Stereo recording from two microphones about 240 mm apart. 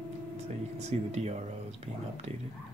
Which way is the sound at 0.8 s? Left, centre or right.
Right.